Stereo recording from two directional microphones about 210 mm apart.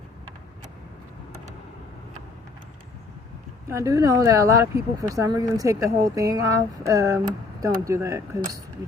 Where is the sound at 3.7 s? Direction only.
15° right (ahead or behind).